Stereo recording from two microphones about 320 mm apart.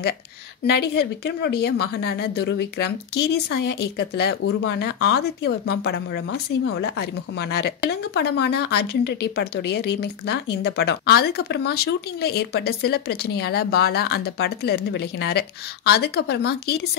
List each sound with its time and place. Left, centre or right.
0.7 s a woman's voice: left